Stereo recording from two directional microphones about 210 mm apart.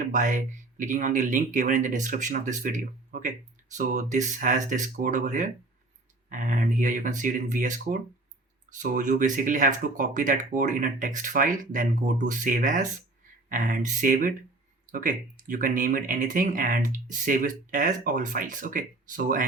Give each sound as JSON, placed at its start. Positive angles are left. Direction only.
{"t": 0.1, "sound": "speech", "side_deg": -40}